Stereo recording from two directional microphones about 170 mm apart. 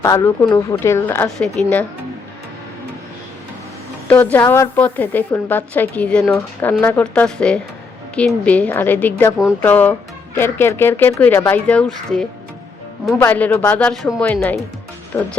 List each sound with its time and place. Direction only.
0.0 s a woman's voice: 20° left (ahead or behind)
4.1 s a woman's voice: 10° left (ahead or behind)